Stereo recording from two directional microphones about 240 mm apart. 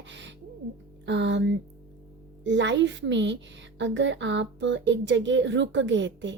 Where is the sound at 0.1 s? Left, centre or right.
Right.